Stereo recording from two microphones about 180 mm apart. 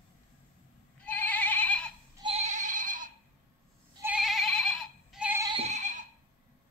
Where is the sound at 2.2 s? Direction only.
35° right (ahead or behind).